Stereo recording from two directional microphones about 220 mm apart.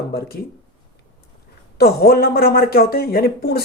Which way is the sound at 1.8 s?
45° left (ahead or behind).